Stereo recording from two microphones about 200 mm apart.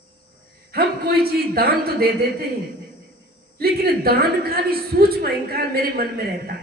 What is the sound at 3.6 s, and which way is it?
A woman's voice, 50° right (ahead or behind).